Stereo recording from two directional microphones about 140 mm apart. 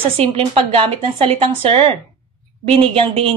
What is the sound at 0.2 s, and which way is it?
A woman's voice, 40° right (ahead or behind).